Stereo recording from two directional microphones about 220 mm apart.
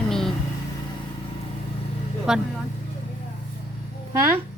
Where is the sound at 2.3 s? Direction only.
5° right (ahead or behind).